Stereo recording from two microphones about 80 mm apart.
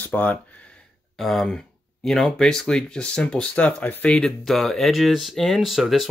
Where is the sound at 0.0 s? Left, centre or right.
Left.